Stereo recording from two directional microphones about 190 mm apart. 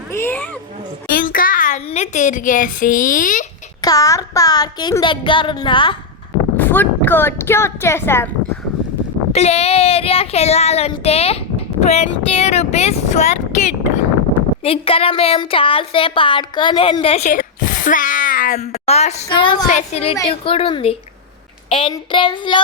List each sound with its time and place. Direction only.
0.1 s a woman's voice: 10° left (ahead or behind)
1.1 s speech: 50° left (ahead or behind)
3.8 s a sound: 20° left (ahead or behind)
6.6 s a woman's voice: 10° left (ahead or behind)
9.3 s a woman's voice: 35° left (ahead or behind)
18.7 s speech: 35° left (ahead or behind)
20.2 s a sound: 30° left (ahead or behind)